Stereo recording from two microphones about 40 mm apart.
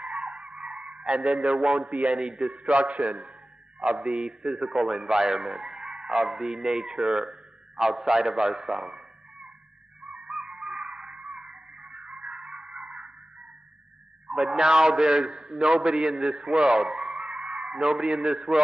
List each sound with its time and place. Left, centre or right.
0.0 s a sound: right
0.9 s a man's voice: right
1.9 s a man's voice: right
2.5 s a man's voice: right
4.4 s a man's voice: centre
7.9 s a man's voice: centre
8.2 s a sound: centre
10.7 s dog: right
11.3 s music: centre
12.4 s a sound: right
14.3 s a man's voice: centre
17.1 s a sound: centre